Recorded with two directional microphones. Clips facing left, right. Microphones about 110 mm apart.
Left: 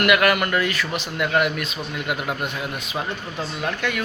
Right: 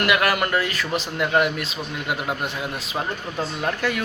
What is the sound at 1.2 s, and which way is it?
Speech, 25° right (ahead or behind).